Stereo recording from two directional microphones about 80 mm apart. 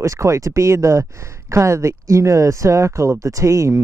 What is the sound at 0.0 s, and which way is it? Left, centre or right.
Speech, right.